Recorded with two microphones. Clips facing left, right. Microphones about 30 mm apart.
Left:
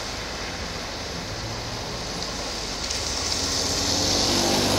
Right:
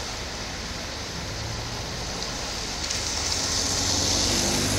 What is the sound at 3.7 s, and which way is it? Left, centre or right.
Vehicle, centre.